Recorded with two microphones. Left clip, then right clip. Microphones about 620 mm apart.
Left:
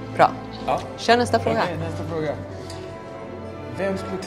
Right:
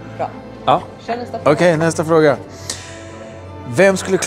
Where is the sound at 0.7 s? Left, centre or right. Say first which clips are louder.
Right 9 dB; right.